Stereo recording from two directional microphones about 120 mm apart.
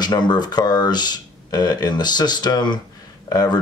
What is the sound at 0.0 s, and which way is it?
Speech, 40° left (ahead or behind).